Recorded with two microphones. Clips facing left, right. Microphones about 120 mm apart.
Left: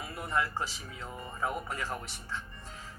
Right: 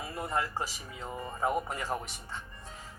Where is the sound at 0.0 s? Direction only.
25° right (ahead or behind).